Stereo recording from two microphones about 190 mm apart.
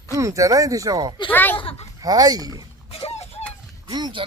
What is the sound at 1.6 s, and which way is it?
Speech, 30° left (ahead or behind).